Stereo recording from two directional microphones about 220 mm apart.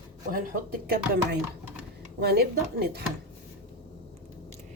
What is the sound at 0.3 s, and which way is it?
Speech, 40° right (ahead or behind).